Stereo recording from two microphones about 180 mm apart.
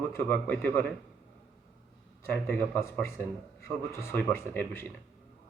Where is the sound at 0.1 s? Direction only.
10° left (ahead or behind).